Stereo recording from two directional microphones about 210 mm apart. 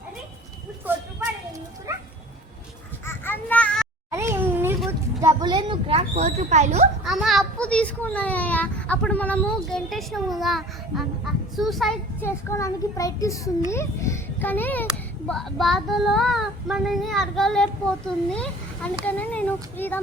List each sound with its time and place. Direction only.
1.9 s dog: 15° right (ahead or behind)
3.1 s a sound: 10° left (ahead or behind)
4.1 s a sound: 10° right (ahead or behind); by 6.8 s 30° right (ahead or behind)
7.0 s child singing: centre (ahead or behind)
12.2 s a child's voice: 15° left (ahead or behind)
15.3 s child singing: centre (ahead or behind)